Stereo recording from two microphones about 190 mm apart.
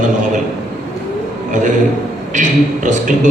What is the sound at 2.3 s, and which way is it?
A man's voice, 40° right (ahead or behind).